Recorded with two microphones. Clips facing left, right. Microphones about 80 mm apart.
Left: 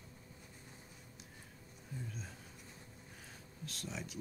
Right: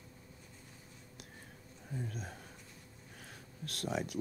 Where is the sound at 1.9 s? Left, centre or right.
Right.